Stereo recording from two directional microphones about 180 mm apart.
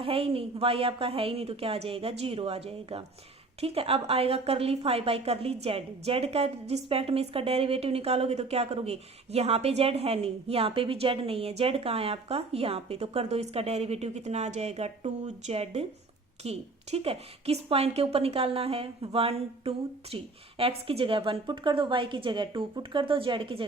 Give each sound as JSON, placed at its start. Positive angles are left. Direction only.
{"t": 0.0, "sound": "a woman's voice", "side_deg": -30}